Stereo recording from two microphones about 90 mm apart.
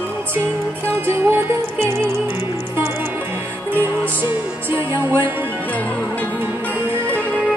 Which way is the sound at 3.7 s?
25° right (ahead or behind).